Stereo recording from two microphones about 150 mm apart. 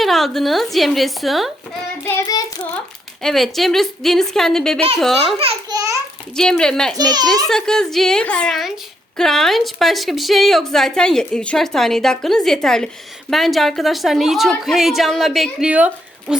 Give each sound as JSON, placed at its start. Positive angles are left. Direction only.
{"t": 0.0, "sound": "a woman's voice", "side_deg": 0}
{"t": 2.2, "sound": "child singing", "side_deg": 25}
{"t": 3.2, "sound": "a woman's voice", "side_deg": 0}
{"t": 6.9, "sound": "a child's voice", "side_deg": -25}
{"t": 7.4, "sound": "a woman's voice", "side_deg": 5}